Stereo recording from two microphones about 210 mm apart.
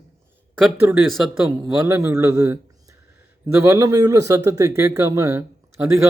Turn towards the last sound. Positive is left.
turn(degrees=-15)  # may be behind; listen again after turning